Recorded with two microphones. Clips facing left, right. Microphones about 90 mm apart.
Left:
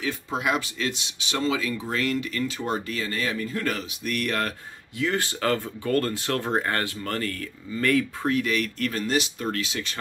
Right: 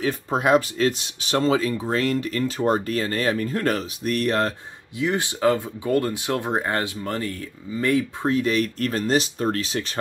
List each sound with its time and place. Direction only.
0.0 s speech: 40° right (ahead or behind)